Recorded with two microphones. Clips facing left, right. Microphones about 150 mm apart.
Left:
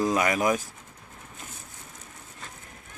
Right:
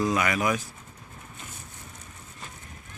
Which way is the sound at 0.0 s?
40° left (ahead or behind).